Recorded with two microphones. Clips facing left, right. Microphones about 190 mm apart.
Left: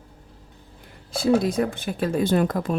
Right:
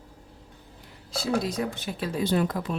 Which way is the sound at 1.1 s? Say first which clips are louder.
Left 7 dB; 55° left (ahead or behind).